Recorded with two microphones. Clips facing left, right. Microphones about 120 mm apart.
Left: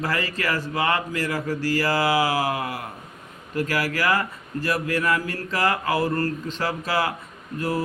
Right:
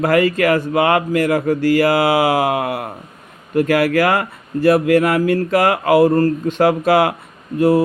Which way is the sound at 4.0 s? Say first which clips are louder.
Right 7 dB; 55° right (ahead or behind).